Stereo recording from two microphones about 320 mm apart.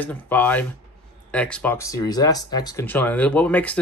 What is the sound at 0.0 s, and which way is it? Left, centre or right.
Speech, centre.